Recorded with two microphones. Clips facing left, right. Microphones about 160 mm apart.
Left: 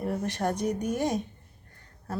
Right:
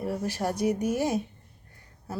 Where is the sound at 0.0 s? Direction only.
5° right (ahead or behind).